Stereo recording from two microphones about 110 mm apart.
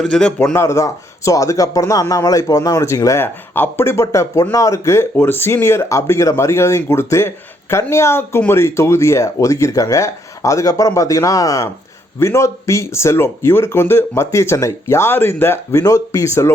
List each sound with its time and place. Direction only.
0.0 s speech: 10° left (ahead or behind)
0.5 s speech: 25° left (ahead or behind)
15.8 s speech: 30° left (ahead or behind)